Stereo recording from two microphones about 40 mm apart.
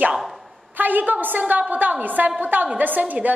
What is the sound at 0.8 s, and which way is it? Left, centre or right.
A woman's voice, right.